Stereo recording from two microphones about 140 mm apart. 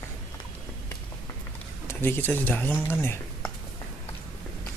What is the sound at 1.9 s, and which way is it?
Speech, 15° left (ahead or behind).